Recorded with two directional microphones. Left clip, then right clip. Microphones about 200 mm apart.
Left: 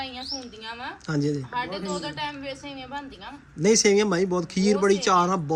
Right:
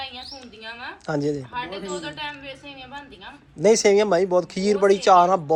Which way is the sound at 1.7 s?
20° left (ahead or behind).